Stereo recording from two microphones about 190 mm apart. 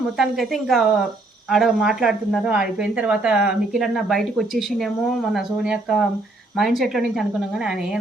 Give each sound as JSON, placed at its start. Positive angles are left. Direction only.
{"t": 0.2, "sound": "a woman's voice", "side_deg": 0}